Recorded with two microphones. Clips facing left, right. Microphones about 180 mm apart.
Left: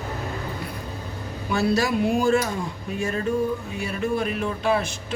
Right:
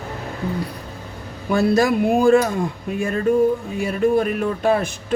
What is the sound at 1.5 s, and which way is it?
Speech, 50° right (ahead or behind).